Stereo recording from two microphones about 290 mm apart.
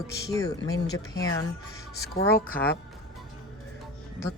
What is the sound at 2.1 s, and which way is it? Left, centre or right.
Speech, left.